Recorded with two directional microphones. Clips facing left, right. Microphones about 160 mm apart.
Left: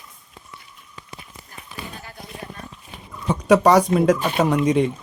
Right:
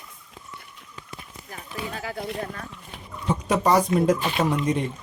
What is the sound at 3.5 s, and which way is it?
Speech, 80° left.